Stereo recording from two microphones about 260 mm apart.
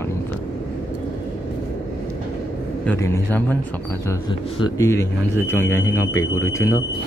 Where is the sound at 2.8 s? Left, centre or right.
Centre.